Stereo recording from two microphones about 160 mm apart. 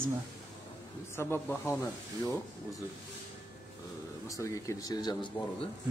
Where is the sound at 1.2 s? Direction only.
15° left (ahead or behind).